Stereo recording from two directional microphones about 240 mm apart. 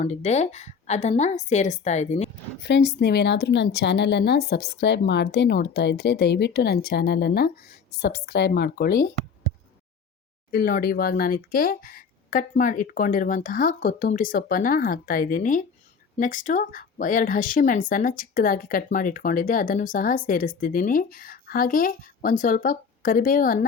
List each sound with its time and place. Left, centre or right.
0.0 s a woman's voice: left
2.6 s a woman's voice: left
10.5 s speech: left